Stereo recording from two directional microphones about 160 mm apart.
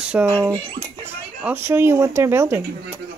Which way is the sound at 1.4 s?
15° right (ahead or behind).